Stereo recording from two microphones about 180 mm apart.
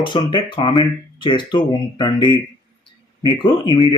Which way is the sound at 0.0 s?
25° left (ahead or behind).